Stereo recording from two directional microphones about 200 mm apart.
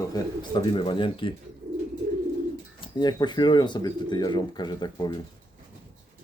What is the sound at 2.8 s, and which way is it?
Speech, 20° left (ahead or behind).